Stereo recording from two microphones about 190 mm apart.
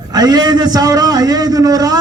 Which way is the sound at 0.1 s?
20° right (ahead or behind).